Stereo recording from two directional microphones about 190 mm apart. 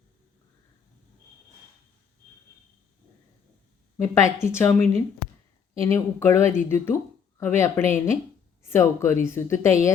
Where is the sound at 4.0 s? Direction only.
15° left (ahead or behind).